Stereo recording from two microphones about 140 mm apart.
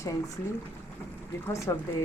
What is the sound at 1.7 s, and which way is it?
Speech, 20° left (ahead or behind).